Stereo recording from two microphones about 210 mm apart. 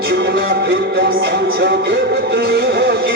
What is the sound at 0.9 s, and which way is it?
Music, 50° right (ahead or behind).